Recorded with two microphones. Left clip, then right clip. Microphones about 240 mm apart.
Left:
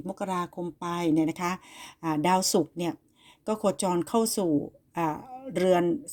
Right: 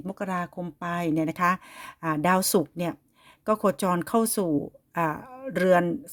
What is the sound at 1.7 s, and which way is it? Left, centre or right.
Speech, right.